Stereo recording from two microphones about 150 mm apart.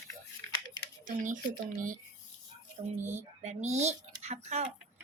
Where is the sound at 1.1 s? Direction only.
60° right (ahead or behind).